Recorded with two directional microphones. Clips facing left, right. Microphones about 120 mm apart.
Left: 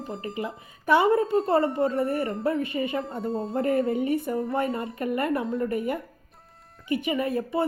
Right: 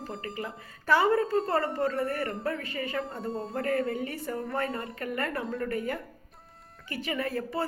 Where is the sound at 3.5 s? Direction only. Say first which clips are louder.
Left 5 dB; 25° left (ahead or behind).